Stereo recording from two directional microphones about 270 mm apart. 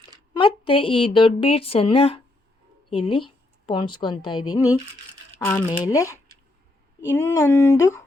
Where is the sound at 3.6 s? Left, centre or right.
Centre.